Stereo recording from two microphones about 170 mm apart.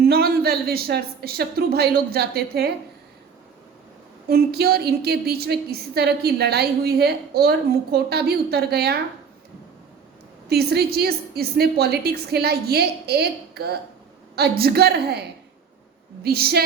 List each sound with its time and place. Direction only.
0.0 s a woman's voice: 65° right (ahead or behind)
4.3 s a woman's voice: 65° right (ahead or behind)
10.5 s a woman's voice: 70° right (ahead or behind)
16.2 s a woman's voice: 65° right (ahead or behind)